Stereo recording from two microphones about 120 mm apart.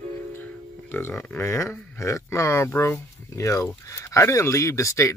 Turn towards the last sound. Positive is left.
turn(degrees=25)  # may be behind; listen again after turning